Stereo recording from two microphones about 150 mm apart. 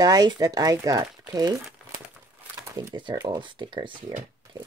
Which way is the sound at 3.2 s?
30° right (ahead or behind).